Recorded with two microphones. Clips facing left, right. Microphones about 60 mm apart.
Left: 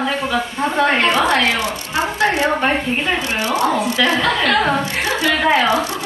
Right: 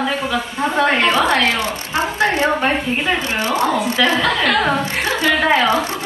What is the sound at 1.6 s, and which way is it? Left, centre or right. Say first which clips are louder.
Speech: even; right.